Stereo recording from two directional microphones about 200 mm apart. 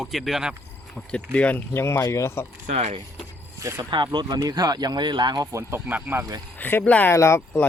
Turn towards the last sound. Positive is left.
turn(degrees=10)  # may be behind; listen again after turning